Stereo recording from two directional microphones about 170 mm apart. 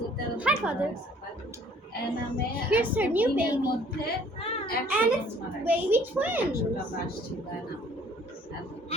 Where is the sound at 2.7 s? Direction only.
10° right (ahead or behind).